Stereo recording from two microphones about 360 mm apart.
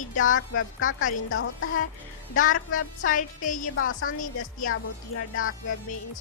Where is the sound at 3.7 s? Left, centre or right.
Left.